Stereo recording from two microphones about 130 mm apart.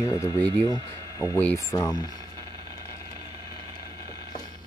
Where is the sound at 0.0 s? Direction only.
30° left (ahead or behind).